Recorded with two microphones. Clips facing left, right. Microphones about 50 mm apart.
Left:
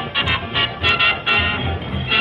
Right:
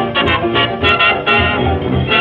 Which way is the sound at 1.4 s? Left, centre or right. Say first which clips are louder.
Right 8 dB; centre.